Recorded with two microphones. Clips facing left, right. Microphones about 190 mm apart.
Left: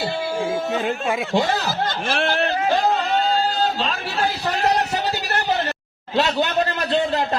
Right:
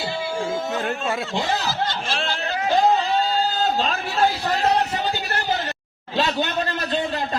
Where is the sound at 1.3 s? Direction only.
50° left (ahead or behind).